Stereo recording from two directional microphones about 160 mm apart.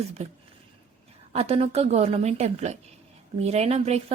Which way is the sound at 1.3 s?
40° right (ahead or behind).